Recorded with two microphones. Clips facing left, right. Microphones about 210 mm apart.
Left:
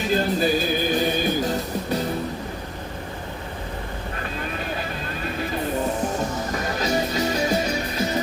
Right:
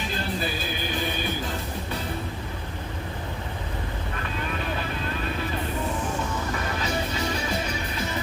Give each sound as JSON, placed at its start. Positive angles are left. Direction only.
{"t": 0.1, "sound": "music", "side_deg": 40}
{"t": 6.3, "sound": "music", "side_deg": 40}